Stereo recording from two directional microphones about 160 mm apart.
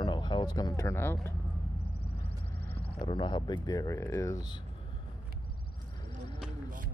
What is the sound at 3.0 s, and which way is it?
Speech, 30° left (ahead or behind).